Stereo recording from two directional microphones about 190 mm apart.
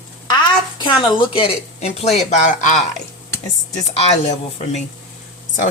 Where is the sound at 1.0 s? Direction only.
25° left (ahead or behind).